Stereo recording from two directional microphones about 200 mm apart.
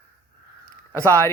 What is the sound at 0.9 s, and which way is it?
Speech, 15° right (ahead or behind).